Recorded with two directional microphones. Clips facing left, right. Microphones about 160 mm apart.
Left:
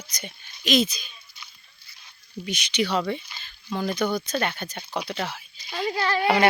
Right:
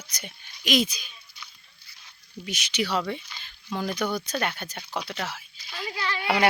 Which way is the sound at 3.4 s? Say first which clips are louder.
Left 2 dB; 15° right (ahead or behind).